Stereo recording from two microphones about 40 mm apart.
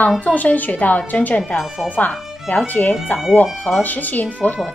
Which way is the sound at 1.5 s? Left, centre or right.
Left.